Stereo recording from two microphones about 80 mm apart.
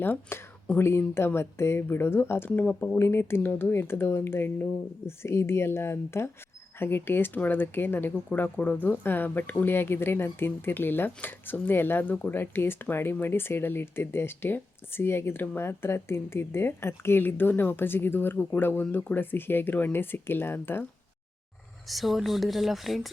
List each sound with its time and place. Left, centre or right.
0.0 s speech: left
2.6 s speech: centre
3.0 s speech: left
21.8 s speech: centre